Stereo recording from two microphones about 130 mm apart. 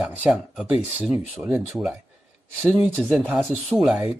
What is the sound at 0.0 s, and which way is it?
Speech, 5° right (ahead or behind).